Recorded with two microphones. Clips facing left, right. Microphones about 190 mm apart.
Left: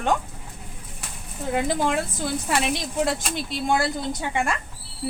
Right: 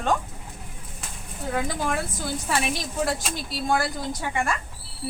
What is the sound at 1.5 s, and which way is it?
A woman's voice, 25° left (ahead or behind).